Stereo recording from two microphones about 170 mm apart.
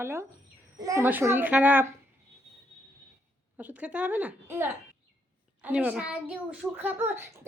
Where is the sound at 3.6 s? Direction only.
10° right (ahead or behind).